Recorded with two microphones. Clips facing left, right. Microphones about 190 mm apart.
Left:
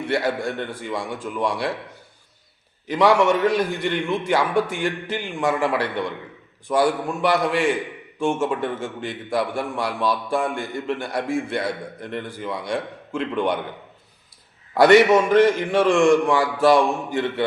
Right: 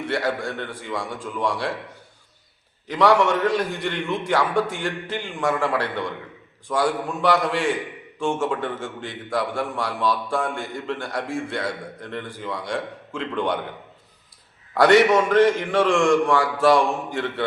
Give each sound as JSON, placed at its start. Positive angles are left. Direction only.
{"t": 0.1, "sound": "a man's voice", "side_deg": 15}
{"t": 2.9, "sound": "a man's voice", "side_deg": 15}
{"t": 14.7, "sound": "a man's voice", "side_deg": 15}